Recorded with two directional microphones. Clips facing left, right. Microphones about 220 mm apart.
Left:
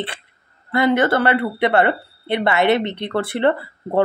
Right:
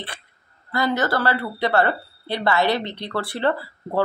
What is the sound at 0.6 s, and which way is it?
Speech, 25° left (ahead or behind).